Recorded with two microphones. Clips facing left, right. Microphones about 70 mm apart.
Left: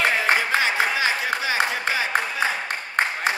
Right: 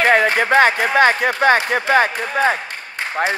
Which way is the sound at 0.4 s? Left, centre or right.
Right.